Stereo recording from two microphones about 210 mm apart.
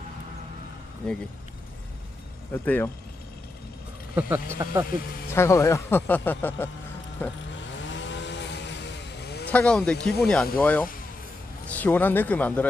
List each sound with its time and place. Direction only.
1.0 s speech: 5° left (ahead or behind)
2.5 s speech: 10° left (ahead or behind)
4.1 s speech: 10° right (ahead or behind)
5.3 s speech: 10° left (ahead or behind)
7.9 s chainsaw: 60° left (ahead or behind)
9.5 s speech: 5° left (ahead or behind)